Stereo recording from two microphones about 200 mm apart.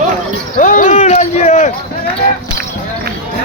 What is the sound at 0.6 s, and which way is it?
Basketball bounce, 40° left (ahead or behind).